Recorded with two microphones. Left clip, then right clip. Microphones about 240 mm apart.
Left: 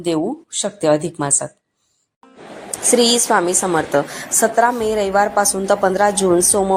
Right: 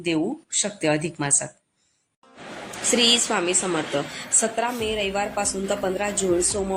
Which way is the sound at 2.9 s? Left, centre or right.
Left.